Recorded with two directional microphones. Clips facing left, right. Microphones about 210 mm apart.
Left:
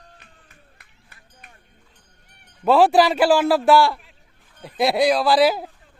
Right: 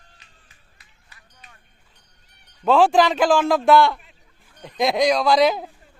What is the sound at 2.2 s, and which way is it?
Cat, 50° left (ahead or behind).